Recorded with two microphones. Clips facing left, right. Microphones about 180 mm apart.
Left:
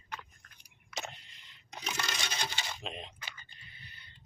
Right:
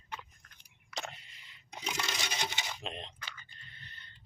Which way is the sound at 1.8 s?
15° right (ahead or behind).